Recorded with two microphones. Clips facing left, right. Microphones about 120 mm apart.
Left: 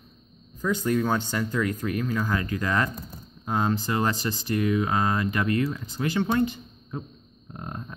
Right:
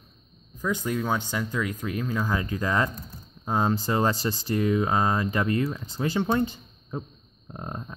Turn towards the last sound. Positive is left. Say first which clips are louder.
# right 1 dB
turn(degrees=-20)  # may be behind; listen again after turning